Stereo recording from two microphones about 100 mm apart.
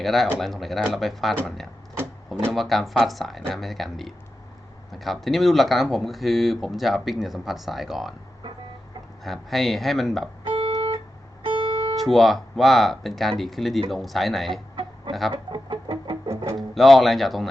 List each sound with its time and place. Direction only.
0.0 s speech: centre (ahead or behind)
9.2 s speech: centre (ahead or behind)
10.4 s guitar: 60° right (ahead or behind)
11.4 s music: 50° right (ahead or behind)
11.9 s speech: centre (ahead or behind)
15.3 s music: 50° right (ahead or behind)
16.6 s speech: centre (ahead or behind)